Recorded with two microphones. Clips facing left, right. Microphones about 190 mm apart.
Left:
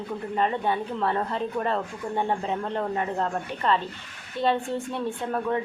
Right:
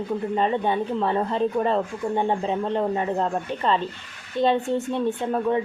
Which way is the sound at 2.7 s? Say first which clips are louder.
Right 3 dB; 20° right (ahead or behind).